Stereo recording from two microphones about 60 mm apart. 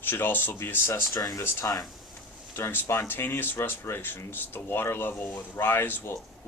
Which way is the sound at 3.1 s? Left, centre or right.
Left.